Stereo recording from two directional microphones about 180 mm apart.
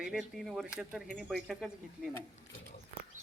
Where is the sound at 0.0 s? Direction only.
Centre (ahead or behind).